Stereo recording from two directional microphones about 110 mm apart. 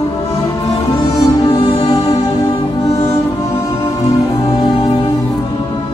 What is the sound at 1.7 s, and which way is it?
Music, 65° left (ahead or behind).